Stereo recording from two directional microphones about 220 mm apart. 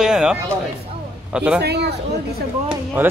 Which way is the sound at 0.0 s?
5° right (ahead or behind).